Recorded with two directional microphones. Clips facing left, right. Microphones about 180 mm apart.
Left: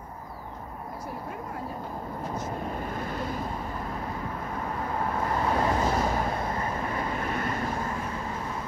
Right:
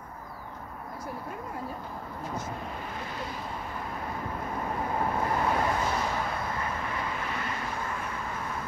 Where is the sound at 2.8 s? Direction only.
45° left (ahead or behind).